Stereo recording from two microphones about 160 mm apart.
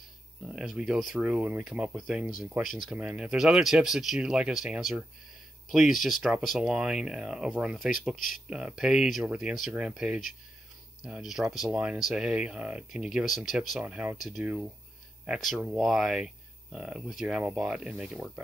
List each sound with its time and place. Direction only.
0.5 s speech: 5° right (ahead or behind)